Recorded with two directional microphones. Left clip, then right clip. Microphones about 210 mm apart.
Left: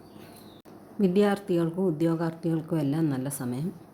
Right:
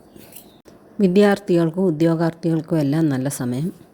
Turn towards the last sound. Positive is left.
turn(degrees=-30)  # may be behind; listen again after turning